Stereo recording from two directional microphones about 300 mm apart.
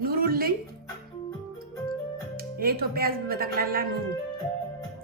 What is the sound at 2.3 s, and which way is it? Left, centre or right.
Speech, right.